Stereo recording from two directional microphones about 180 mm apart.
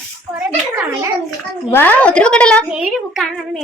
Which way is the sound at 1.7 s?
10° left (ahead or behind).